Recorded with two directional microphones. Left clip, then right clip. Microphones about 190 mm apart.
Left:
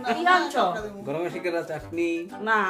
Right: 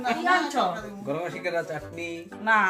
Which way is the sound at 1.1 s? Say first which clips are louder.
Left 1 dB; 35° left (ahead or behind).